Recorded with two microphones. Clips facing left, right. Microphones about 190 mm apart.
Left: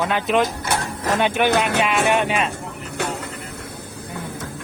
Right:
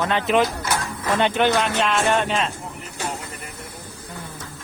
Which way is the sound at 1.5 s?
60° left (ahead or behind).